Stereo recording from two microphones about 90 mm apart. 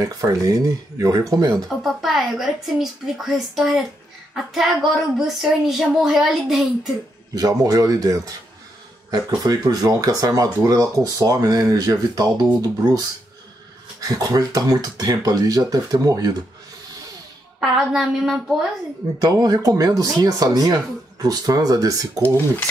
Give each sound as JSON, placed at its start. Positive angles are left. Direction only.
{"t": 0.0, "sound": "speech", "side_deg": -40}
{"t": 1.7, "sound": "speech", "side_deg": 0}
{"t": 7.3, "sound": "speech", "side_deg": -45}
{"t": 14.0, "sound": "speech", "side_deg": -45}
{"t": 17.6, "sound": "speech", "side_deg": 0}
{"t": 19.2, "sound": "speech", "side_deg": -45}